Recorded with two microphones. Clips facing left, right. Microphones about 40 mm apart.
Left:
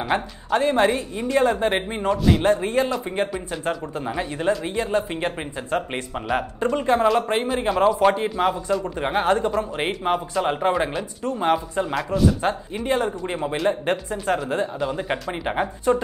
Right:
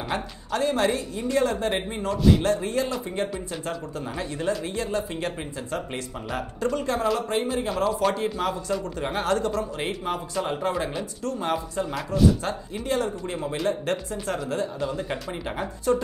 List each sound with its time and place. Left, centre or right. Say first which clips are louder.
0.1 s a man's voice: left 7 dB; left
11.9 s a man's voice: even; centre
12.4 s speech: left 6 dB; left